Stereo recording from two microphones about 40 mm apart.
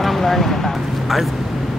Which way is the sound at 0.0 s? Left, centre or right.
Centre.